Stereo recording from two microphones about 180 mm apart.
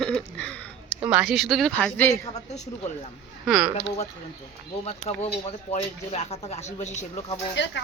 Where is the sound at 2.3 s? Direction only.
40° left (ahead or behind).